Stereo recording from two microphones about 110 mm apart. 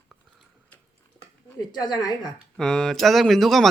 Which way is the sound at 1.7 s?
40° left (ahead or behind).